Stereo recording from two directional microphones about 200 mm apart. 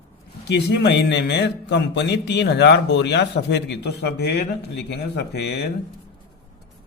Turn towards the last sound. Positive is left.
turn(degrees=55)  # may be behind; listen again after turning